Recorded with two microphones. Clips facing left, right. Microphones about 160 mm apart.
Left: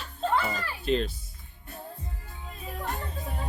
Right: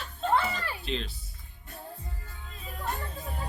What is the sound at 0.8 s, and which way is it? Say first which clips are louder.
Speech: left 10 dB; 45° left (ahead or behind).